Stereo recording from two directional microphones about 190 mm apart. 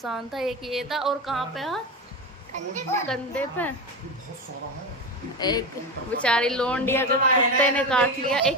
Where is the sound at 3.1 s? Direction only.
10° left (ahead or behind).